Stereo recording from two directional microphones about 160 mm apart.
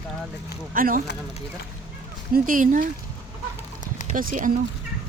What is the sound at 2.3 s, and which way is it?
Speech, 60° right (ahead or behind).